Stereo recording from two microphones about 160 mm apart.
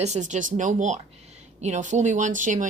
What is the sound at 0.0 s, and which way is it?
Speech, 45° right (ahead or behind).